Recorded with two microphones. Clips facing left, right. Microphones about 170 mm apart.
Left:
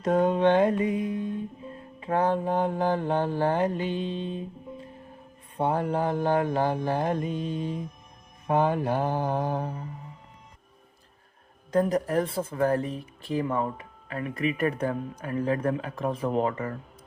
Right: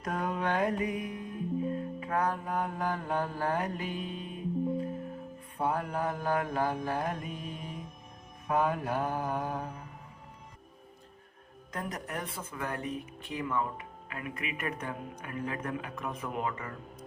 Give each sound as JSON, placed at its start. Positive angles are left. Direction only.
{"t": 0.0, "sound": "mantra", "side_deg": 25}
{"t": 11.7, "sound": "speech", "side_deg": 30}